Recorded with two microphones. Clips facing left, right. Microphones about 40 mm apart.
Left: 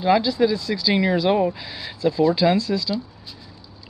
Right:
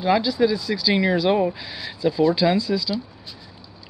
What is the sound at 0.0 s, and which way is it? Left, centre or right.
Speech, centre.